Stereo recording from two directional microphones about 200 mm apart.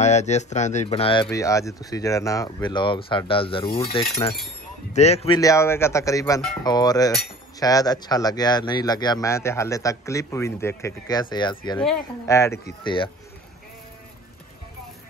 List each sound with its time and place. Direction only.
0.0 s speech: 35° left (ahead or behind)
1.3 s speech: 15° left (ahead or behind); by 5.4 s 30° left (ahead or behind)
5.4 s speech: 15° left (ahead or behind)